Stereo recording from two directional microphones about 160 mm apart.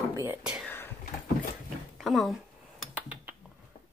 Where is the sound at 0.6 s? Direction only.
10° left (ahead or behind).